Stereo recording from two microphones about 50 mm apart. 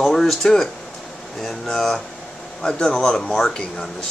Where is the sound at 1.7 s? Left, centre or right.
Centre.